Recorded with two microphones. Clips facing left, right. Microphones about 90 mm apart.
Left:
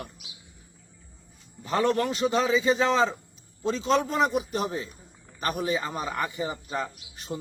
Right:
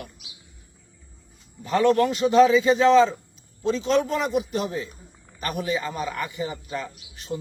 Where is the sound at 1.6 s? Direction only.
30° left (ahead or behind).